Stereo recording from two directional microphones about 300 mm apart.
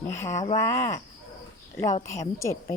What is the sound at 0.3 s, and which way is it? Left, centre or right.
Speech, centre.